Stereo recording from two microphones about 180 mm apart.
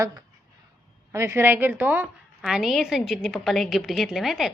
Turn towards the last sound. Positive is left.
turn(degrees=0)  # may be behind; listen again after turning